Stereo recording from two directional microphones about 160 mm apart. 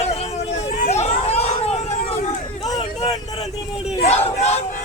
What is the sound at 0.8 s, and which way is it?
Chatter, 45° left (ahead or behind).